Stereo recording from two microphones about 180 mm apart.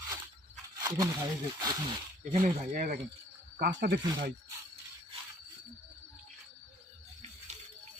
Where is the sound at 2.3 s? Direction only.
40° right (ahead or behind); by 4.0 s 55° right (ahead or behind).